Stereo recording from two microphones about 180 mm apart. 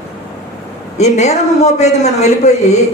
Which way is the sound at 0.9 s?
40° left (ahead or behind).